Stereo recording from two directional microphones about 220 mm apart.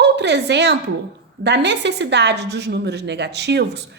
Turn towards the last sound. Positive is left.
turn(degrees=-50)  # may be behind; listen again after turning